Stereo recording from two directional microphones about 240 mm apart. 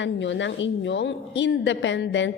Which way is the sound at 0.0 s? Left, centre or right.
Left.